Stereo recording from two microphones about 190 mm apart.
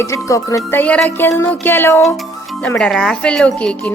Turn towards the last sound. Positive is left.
turn(degrees=5)  # may be behind; listen again after turning